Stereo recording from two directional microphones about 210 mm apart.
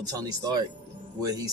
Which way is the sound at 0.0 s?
15° right (ahead or behind).